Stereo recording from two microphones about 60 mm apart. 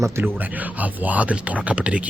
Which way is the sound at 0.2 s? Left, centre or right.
Right.